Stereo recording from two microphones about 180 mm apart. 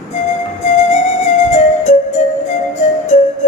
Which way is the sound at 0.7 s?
40° left (ahead or behind).